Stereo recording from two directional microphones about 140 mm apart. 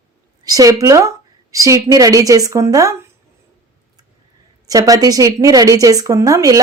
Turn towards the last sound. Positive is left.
turn(degrees=-25)  # may be behind; listen again after turning